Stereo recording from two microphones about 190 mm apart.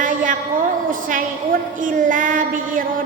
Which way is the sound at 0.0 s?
45° right (ahead or behind).